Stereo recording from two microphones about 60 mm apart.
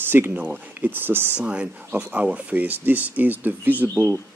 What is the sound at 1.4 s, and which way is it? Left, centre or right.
Speech, centre.